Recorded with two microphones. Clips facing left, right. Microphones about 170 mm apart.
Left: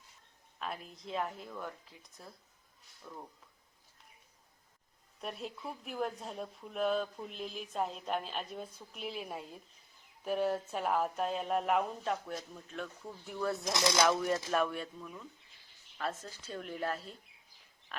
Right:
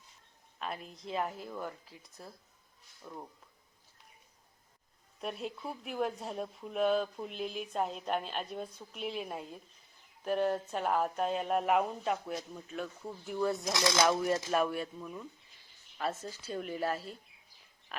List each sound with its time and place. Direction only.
0.6 s speech: centre (ahead or behind)
5.2 s speech: centre (ahead or behind)